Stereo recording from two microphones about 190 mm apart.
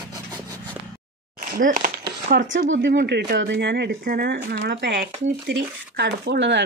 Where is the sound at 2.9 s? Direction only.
55° right (ahead or behind).